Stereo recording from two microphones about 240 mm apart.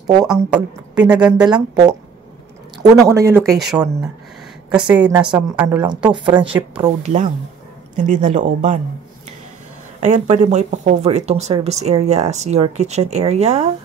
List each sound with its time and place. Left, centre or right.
0.2 s a woman's voice: centre
1.5 s speech: centre
3.1 s a woman's voice: centre
5.1 s speech: centre
5.6 s speech: centre
5.9 s speech: centre
9.9 s speech: right